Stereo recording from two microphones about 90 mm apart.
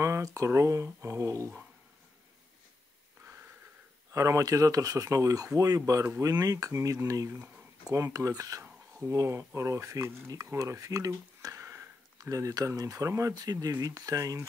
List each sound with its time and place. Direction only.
0.0 s speech: 35° right (ahead or behind)
4.1 s speech: 35° right (ahead or behind)